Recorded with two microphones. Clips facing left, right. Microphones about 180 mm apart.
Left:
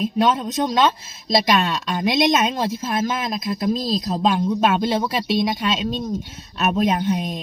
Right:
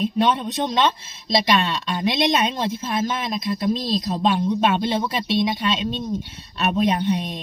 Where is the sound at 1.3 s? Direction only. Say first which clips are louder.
Left 1 dB; 45° left (ahead or behind).